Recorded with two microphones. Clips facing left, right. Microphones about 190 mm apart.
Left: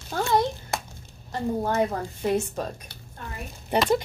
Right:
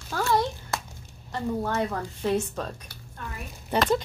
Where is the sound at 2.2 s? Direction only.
15° left (ahead or behind).